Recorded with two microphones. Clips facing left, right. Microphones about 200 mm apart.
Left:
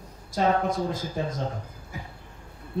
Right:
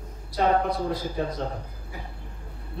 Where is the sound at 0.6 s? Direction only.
45° left (ahead or behind).